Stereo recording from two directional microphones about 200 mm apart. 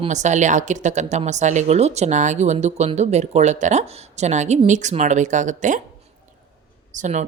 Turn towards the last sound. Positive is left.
turn(degrees=-35)  # may be behind; listen again after turning